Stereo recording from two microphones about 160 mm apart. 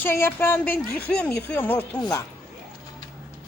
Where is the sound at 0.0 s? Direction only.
15° left (ahead or behind).